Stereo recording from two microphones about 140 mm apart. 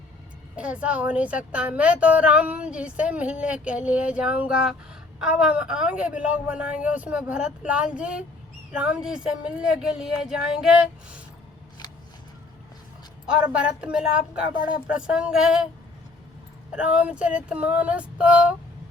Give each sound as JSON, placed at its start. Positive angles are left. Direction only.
{"t": 0.5, "sound": "a woman's voice", "side_deg": -10}
{"t": 13.6, "sound": "a woman's voice", "side_deg": -5}
{"t": 16.7, "sound": "a woman's voice", "side_deg": -10}